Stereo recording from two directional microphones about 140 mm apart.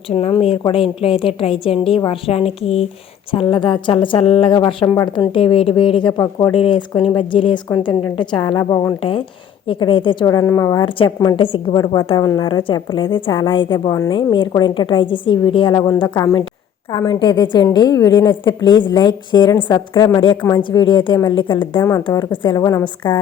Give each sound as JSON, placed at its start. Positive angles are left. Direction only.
{"t": 0.1, "sound": "a woman's voice", "side_deg": 45}
{"t": 5.3, "sound": "a woman's voice", "side_deg": 40}
{"t": 9.0, "sound": "a woman's voice", "side_deg": 40}
{"t": 10.2, "sound": "a woman's voice", "side_deg": 25}
{"t": 10.8, "sound": "a woman's voice", "side_deg": 35}
{"t": 19.9, "sound": "a woman's voice", "side_deg": 20}
{"t": 20.1, "sound": "a woman's voice", "side_deg": 35}
{"t": 23.0, "sound": "a woman's voice", "side_deg": 35}